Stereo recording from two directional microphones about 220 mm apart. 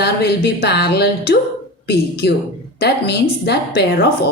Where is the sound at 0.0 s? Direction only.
50° left (ahead or behind).